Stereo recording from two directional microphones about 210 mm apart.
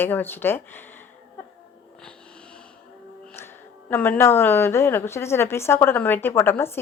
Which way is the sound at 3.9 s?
10° left (ahead or behind).